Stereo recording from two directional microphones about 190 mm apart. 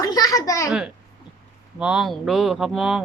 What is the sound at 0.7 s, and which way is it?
A woman's voice, 5° right (ahead or behind).